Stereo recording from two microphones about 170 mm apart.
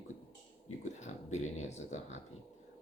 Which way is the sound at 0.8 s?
45° left (ahead or behind).